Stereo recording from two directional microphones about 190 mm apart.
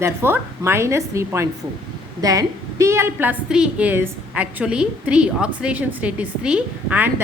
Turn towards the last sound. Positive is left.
turn(degrees=-10)  # may be behind; listen again after turning